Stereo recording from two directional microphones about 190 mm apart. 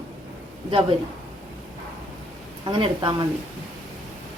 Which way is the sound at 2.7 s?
25° right (ahead or behind).